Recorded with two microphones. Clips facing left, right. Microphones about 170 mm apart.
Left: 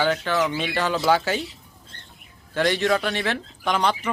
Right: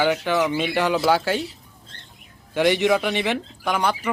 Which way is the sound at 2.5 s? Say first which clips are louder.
Right 3 dB; 15° right (ahead or behind).